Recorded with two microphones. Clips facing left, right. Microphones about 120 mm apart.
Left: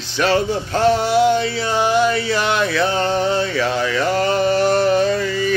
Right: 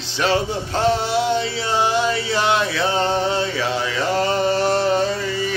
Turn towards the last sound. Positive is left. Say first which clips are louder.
# left 3 dB
turn(degrees=-25)  # may be behind; listen again after turning